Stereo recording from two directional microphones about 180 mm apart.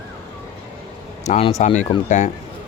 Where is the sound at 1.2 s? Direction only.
35° left (ahead or behind).